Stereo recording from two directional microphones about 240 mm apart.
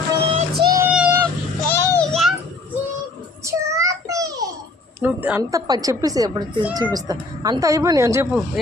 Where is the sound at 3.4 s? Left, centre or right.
Centre.